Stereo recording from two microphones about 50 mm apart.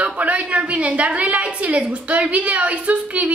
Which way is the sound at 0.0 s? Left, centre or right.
Right.